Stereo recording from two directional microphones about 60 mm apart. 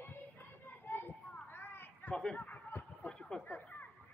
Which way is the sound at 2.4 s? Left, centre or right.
Left.